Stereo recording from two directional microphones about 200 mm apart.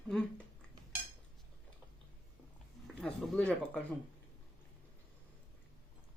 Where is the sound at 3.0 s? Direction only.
Centre (ahead or behind).